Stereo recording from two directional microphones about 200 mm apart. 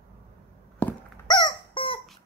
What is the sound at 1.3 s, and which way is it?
Squeak, 20° left (ahead or behind).